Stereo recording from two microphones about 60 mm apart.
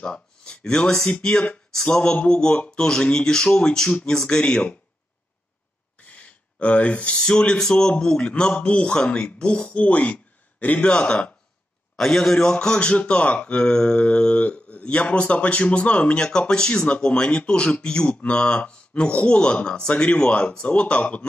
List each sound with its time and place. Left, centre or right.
0.0 s speech: centre
5.9 s a sound: left
7.2 s speech: centre
10.8 s speech: centre
12.0 s speech: centre; by 21.3 s left